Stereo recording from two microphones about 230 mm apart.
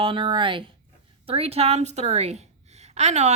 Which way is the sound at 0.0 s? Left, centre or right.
Right.